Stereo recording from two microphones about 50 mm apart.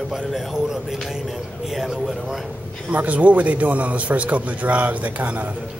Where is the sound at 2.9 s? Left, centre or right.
Right.